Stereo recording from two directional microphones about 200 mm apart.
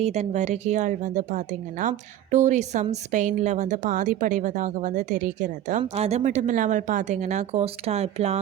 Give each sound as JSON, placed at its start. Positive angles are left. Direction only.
{"t": 0.0, "sound": "a woman's voice", "side_deg": -35}